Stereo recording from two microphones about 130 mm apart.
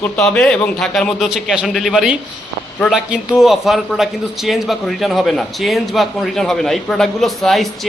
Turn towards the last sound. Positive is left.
turn(degrees=0)  # may be behind; listen again after turning